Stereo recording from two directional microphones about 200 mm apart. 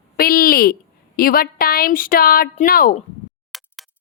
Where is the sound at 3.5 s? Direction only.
Centre (ahead or behind).